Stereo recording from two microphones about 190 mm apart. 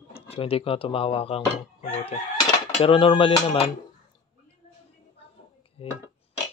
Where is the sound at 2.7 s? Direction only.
30° left (ahead or behind).